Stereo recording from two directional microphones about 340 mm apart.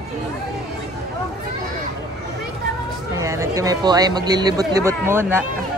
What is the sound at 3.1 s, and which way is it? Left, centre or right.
Speech, centre.